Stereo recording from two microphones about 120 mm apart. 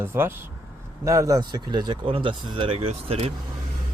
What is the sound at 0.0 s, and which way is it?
Speech, 20° right (ahead or behind).